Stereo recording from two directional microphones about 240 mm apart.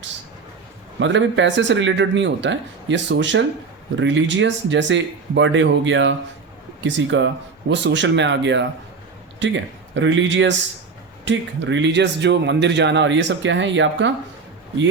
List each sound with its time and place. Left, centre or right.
0.9 s speech: right